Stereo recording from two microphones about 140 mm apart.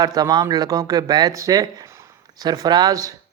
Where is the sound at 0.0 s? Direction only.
25° right (ahead or behind).